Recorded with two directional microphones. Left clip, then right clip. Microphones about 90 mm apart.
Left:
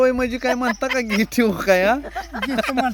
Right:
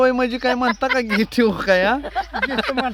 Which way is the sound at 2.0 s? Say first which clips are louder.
Right 5 dB; 15° right (ahead or behind).